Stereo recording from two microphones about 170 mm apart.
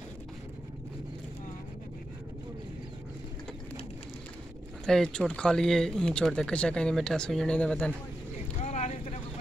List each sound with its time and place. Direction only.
4.8 s speech: 5° left (ahead or behind)
8.5 s vehicle: 40° left (ahead or behind)